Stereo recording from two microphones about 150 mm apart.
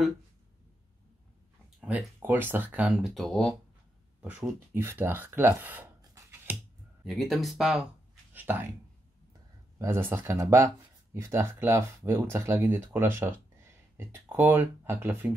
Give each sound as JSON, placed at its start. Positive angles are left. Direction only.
{"t": 1.9, "sound": "speech", "side_deg": -10}
{"t": 7.1, "sound": "speech", "side_deg": 0}
{"t": 8.3, "sound": "speech", "side_deg": -15}
{"t": 9.8, "sound": "speech", "side_deg": -15}